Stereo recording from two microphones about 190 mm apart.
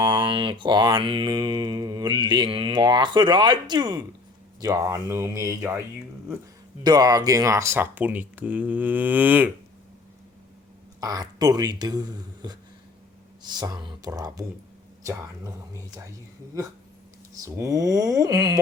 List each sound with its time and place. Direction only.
0.0 s mantra: 25° right (ahead or behind)
4.6 s speech: 20° right (ahead or behind)
6.8 s speech: 20° right (ahead or behind)
11.0 s mantra: 20° right (ahead or behind)
15.0 s speech: 15° right (ahead or behind)
16.5 s speech: 15° right (ahead or behind)